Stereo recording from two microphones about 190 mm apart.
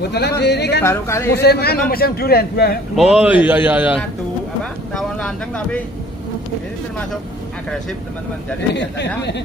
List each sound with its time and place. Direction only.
0.0 s a man's voice: 60° left (ahead or behind)
0.8 s speech: 15° left (ahead or behind)
1.3 s a man's voice: 60° left (ahead or behind)
3.0 s a man's voice: 5° right (ahead or behind)
4.9 s a sound: 5° left (ahead or behind)
8.7 s a man's voice: 65° left (ahead or behind)